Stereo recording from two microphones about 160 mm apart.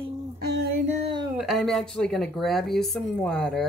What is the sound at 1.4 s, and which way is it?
Speech, centre (ahead or behind).